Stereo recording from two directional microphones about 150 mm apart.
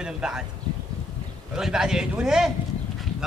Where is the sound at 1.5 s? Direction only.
5° right (ahead or behind).